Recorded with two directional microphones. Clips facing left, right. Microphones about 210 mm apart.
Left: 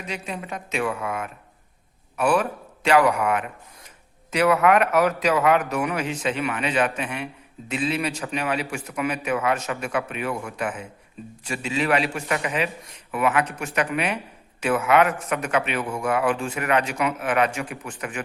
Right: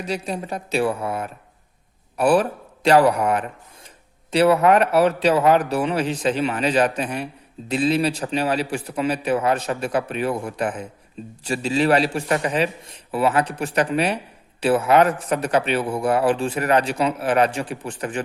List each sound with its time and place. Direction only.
0.0 s a man's voice: 35° right (ahead or behind)